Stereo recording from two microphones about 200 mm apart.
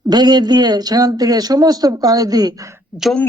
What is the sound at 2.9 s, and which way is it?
Speech, centre (ahead or behind).